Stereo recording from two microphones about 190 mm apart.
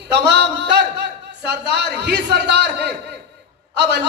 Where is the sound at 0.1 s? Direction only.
60° right (ahead or behind).